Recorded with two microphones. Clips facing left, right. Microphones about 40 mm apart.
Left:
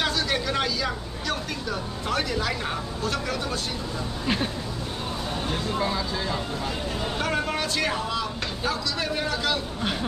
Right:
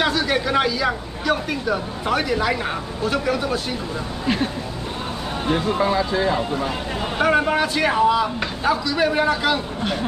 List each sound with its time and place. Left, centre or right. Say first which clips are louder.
0.0 s speech: right 6 dB; centre
5.5 s speech: right 9 dB; right